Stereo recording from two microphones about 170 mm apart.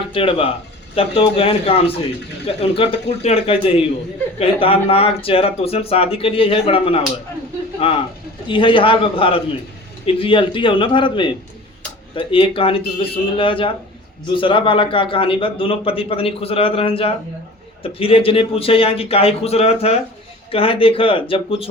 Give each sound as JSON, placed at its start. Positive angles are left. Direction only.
{"t": 0.1, "sound": "a man's voice", "side_deg": 30}